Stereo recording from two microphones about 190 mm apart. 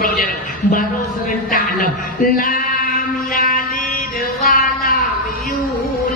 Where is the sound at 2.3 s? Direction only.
50° left (ahead or behind).